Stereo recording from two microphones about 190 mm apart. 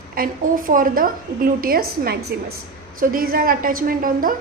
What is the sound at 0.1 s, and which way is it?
A woman's voice, 50° right (ahead or behind).